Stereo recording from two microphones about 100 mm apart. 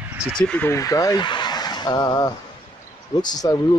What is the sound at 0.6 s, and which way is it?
Speech, 35° left (ahead or behind).